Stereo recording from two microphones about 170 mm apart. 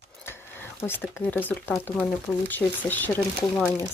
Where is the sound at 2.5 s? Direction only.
10° left (ahead or behind).